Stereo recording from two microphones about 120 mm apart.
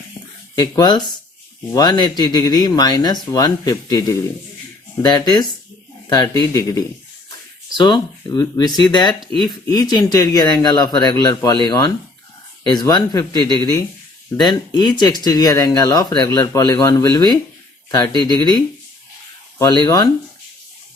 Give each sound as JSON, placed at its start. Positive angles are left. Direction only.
{"t": 0.5, "sound": "speech", "side_deg": 35}
{"t": 5.0, "sound": "speech", "side_deg": 35}
{"t": 19.8, "sound": "speech", "side_deg": 35}